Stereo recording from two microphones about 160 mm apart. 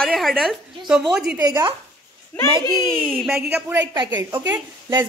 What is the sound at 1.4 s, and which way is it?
Speech, 20° right (ahead or behind).